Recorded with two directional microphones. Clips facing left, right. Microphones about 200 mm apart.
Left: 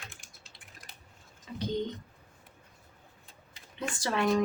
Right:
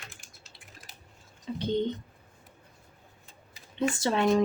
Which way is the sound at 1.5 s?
30° right (ahead or behind).